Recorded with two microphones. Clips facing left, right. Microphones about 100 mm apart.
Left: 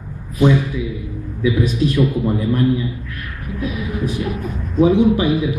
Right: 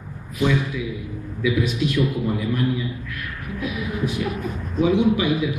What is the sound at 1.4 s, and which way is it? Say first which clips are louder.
A man's voice: left 4 dB; 35° left (ahead or behind).